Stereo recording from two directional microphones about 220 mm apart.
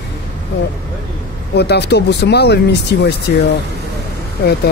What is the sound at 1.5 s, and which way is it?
Speech, 50° left (ahead or behind).